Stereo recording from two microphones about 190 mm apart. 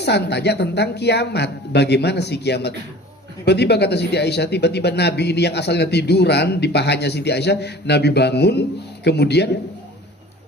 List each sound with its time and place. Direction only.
0.0 s speech: 60° left (ahead or behind)